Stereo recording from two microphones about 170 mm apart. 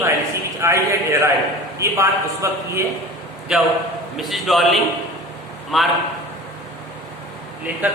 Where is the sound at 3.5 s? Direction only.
5° right (ahead or behind).